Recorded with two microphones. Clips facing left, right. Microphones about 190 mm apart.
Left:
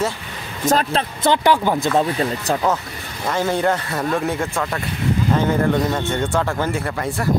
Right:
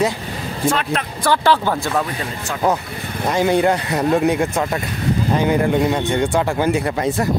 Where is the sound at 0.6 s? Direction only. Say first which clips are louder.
Left 2 dB; 40° left (ahead or behind).